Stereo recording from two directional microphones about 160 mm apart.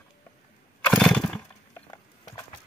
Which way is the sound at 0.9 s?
5° left (ahead or behind).